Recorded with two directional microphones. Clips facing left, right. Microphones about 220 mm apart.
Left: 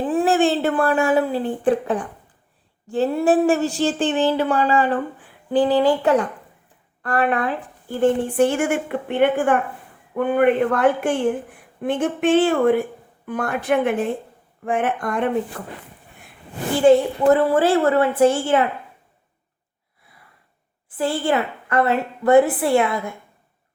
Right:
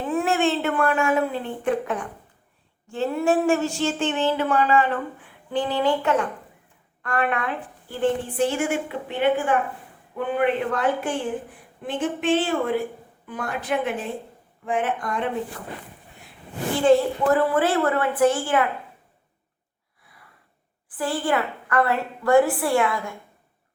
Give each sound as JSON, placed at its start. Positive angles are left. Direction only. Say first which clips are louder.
{"t": 0.0, "sound": "speech", "louder": "left 4 dB", "side_deg": 30}
{"t": 2.9, "sound": "a sound", "louder": "left 4 dB", "side_deg": 35}
{"t": 7.0, "sound": "a woman's voice", "louder": "left 4 dB", "side_deg": 35}
{"t": 17.3, "sound": "a woman's voice", "louder": "left 2 dB", "side_deg": 30}
{"t": 21.0, "sound": "a woman's voice", "louder": "left 3 dB", "side_deg": 25}